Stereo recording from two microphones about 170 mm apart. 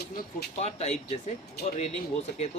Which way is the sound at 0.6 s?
40° left (ahead or behind).